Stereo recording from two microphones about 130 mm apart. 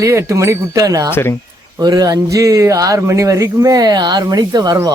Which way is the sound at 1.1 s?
15° left (ahead or behind).